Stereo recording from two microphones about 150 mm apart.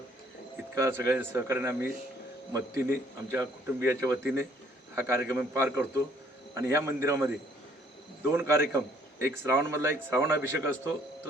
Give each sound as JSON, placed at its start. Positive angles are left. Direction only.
{"t": 0.8, "sound": "a man's voice", "side_deg": -15}
{"t": 8.3, "sound": "a man's voice", "side_deg": -15}